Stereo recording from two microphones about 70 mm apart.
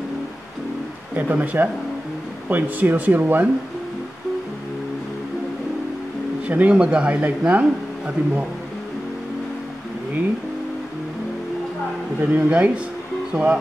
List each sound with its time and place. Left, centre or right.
1.1 s speech: right
6.4 s speech: right
12.2 s speech: right